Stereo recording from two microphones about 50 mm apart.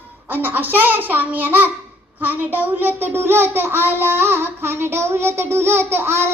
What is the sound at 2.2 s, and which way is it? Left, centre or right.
A child's voice, right.